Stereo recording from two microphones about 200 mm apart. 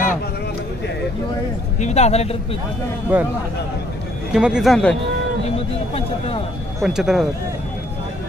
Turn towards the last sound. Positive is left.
turn(degrees=0)  # may be behind; listen again after turning